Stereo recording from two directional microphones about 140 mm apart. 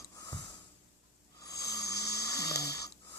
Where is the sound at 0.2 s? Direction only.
25° left (ahead or behind).